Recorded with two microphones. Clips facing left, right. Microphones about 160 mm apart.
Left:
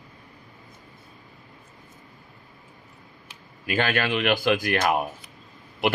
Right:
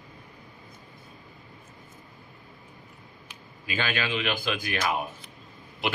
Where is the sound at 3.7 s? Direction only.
60° left (ahead or behind).